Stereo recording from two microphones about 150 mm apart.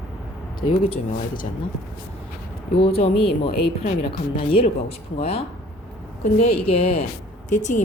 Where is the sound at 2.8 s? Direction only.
40° left (ahead or behind).